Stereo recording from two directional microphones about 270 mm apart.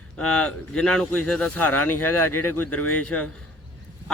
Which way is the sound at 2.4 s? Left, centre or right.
Left.